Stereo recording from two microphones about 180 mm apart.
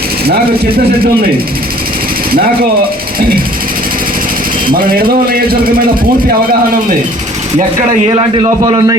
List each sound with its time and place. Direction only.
0.3 s speech: 60° right (ahead or behind)
4.7 s speech: 55° right (ahead or behind)
8.0 s a man's voice: 25° right (ahead or behind)